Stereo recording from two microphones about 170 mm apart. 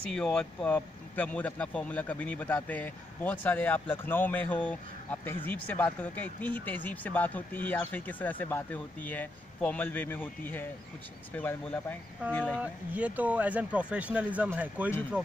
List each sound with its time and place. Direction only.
0.1 s speech: 5° left (ahead or behind)
12.5 s speech: 10° right (ahead or behind)
14.9 s speech: 10° left (ahead or behind)